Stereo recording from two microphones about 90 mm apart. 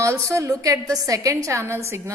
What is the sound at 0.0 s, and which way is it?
A woman's voice, 35° right (ahead or behind).